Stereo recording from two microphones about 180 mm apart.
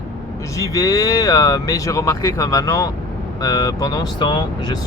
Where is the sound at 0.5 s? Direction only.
20° left (ahead or behind).